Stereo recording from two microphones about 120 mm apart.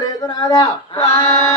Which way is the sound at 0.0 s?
35° left (ahead or behind).